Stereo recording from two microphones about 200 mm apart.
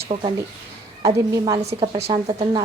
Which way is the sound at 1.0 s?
15° right (ahead or behind).